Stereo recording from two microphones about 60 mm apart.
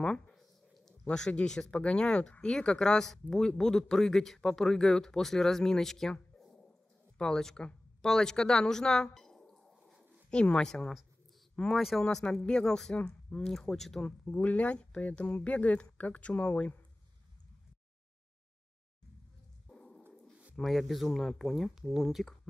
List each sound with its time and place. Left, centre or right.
0.0 s a sound: centre
1.0 s speech: centre
6.4 s a sound: centre
7.2 s speech: centre
12.9 s speech: centre
13.4 s speech: centre
14.0 s speech: left
19.7 s a sound: centre
20.5 s speech: centre